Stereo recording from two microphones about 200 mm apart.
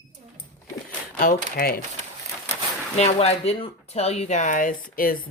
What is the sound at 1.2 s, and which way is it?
Speech, 45° left (ahead or behind).